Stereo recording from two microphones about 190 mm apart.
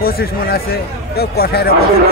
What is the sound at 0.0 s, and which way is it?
A man's voice, 55° left (ahead or behind).